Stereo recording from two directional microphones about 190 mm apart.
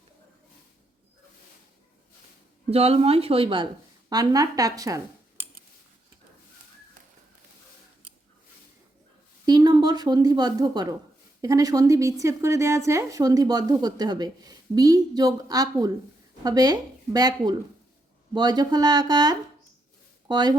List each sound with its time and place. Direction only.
2.6 s speech: 30° right (ahead or behind); by 5.5 s 15° right (ahead or behind)
9.5 s a woman's voice: 20° right (ahead or behind)